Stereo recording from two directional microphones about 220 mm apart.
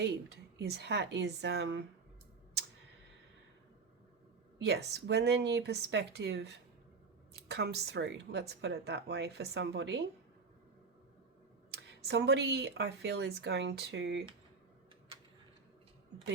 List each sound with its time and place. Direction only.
0.0 s speech: 50° right (ahead or behind)
4.6 s speech: 50° right (ahead or behind)
11.7 s speech: 50° right (ahead or behind)